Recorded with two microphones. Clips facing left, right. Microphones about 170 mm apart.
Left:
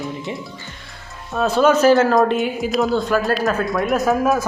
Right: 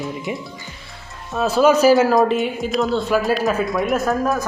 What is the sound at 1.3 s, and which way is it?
A man's voice, 5° right (ahead or behind).